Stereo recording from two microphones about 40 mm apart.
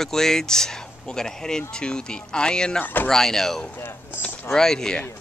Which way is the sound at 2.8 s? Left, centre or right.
Left.